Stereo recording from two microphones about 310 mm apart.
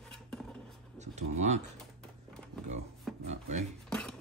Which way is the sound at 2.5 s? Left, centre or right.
Centre.